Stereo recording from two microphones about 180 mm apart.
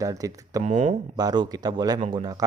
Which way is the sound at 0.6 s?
40° right (ahead or behind).